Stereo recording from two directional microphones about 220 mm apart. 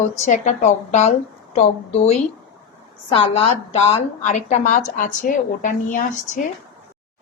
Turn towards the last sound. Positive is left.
turn(degrees=35)  # may be behind; listen again after turning